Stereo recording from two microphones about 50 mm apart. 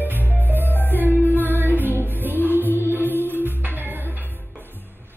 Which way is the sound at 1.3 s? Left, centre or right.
Right.